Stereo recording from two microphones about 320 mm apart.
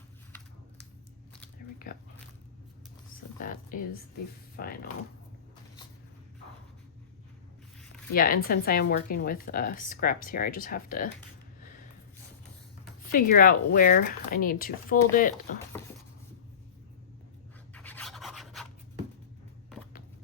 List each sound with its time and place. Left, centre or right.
3.4 s speech: left
8.1 s speech: left
13.1 s speech: left
17.7 s a sound: centre